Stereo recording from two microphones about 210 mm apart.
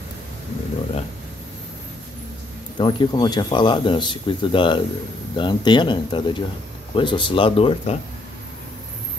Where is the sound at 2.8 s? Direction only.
20° left (ahead or behind).